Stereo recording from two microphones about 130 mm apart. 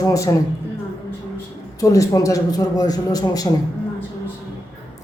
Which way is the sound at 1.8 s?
25° left (ahead or behind).